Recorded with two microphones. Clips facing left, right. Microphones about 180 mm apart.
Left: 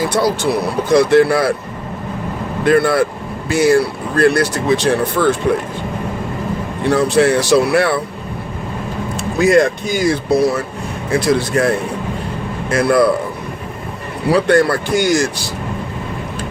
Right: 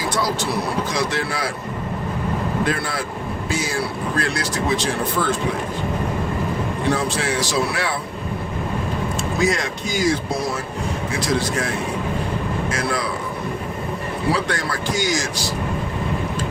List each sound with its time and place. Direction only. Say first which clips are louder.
0.2 s speech: left 7 dB; 60° left (ahead or behind)
2.6 s speech: left 11 dB; 60° left (ahead or behind)
6.9 s speech: left 15 dB; 65° left (ahead or behind)
9.1 s speech: left 10 dB; 60° left (ahead or behind)
12.7 s speech: left 15 dB; 60° left (ahead or behind)
14.4 s speech: left 11 dB; 60° left (ahead or behind)